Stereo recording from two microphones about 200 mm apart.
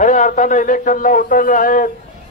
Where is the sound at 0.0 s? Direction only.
40° left (ahead or behind).